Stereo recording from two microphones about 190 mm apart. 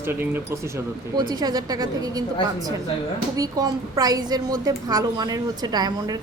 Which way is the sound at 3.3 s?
20° right (ahead or behind).